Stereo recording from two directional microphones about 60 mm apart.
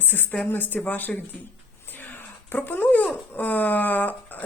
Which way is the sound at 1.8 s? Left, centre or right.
Left.